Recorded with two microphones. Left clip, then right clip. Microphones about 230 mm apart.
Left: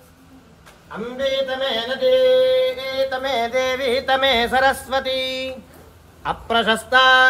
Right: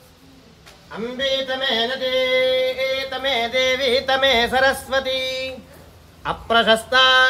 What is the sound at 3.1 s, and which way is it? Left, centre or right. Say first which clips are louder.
Mantra: even; centre.